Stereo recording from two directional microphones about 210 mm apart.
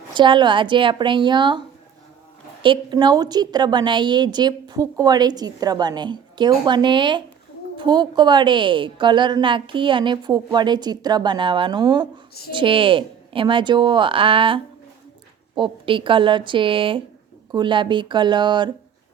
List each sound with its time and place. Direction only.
0.1 s a woman's voice: 20° right (ahead or behind)